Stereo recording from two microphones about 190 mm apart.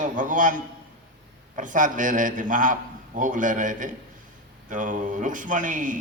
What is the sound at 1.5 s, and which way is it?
A man's voice, 45° right (ahead or behind).